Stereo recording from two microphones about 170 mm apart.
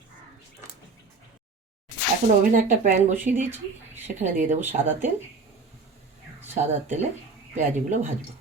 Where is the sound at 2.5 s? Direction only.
50° right (ahead or behind).